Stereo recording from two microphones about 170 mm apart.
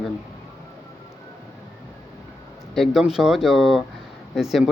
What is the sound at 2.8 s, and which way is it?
Speech, 5° right (ahead or behind).